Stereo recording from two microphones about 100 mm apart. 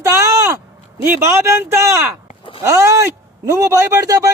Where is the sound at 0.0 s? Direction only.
25° right (ahead or behind).